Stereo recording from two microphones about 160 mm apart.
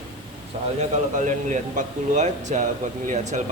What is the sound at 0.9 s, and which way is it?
A man's voice, 50° right (ahead or behind).